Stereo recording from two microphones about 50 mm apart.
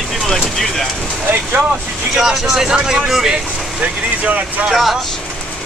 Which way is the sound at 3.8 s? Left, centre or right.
Right.